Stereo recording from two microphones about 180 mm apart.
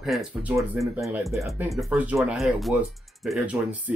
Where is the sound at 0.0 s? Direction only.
5° right (ahead or behind).